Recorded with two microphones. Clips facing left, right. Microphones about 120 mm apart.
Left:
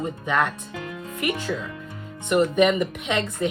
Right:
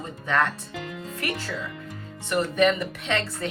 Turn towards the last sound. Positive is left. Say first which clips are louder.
# left 3 dB
turn(degrees=15)  # may be behind; listen again after turning